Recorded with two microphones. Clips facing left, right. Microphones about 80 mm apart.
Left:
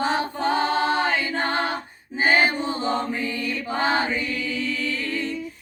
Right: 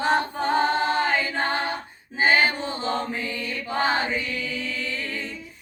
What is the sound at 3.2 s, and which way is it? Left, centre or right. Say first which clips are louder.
Mantra: left 3 dB; centre.